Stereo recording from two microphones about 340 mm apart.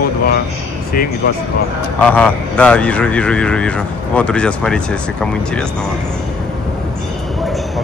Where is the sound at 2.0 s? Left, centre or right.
Centre.